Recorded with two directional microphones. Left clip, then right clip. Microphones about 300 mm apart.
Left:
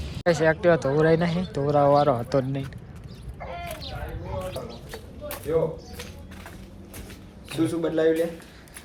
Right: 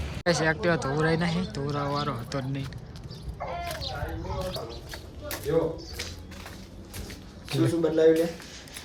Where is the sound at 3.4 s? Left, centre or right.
Right.